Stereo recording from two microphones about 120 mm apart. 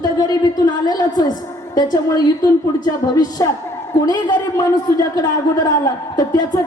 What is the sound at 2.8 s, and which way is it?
A woman's voice, 35° left (ahead or behind).